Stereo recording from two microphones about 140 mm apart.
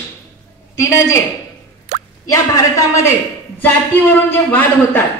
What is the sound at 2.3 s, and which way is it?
A woman's voice, 20° left (ahead or behind).